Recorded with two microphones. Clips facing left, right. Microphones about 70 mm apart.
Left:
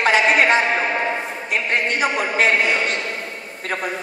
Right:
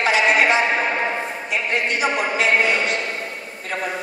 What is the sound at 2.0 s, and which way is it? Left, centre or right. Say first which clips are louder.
A woman's voice: left 2 dB; left.